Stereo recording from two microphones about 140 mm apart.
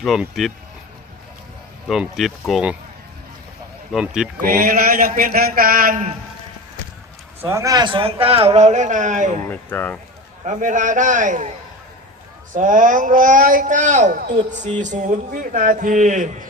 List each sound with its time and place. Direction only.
0.0 s speech: centre (ahead or behind)
1.9 s speech: centre (ahead or behind)
3.9 s speech: 5° right (ahead or behind)
4.4 s speech: 90° right
7.4 s speech: 20° right (ahead or behind); by 9.3 s 60° right (ahead or behind)
9.5 s speech: 15° left (ahead or behind)
10.4 s a man's voice: 60° right (ahead or behind)
12.5 s speech: 70° right (ahead or behind)